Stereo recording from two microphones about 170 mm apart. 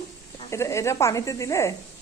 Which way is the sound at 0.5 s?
15° left (ahead or behind).